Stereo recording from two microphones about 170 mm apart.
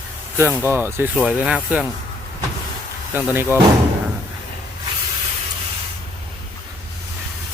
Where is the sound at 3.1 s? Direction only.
10° right (ahead or behind).